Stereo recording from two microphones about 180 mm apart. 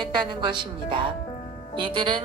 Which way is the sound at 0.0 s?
25° right (ahead or behind).